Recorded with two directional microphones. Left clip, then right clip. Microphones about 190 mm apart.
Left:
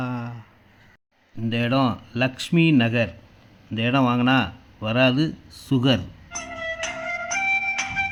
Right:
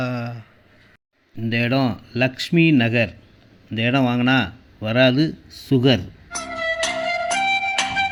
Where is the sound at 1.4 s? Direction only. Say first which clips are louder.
Right 1 dB; 5° right (ahead or behind).